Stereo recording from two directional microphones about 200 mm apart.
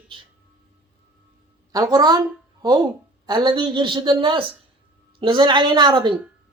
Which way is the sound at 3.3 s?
25° right (ahead or behind).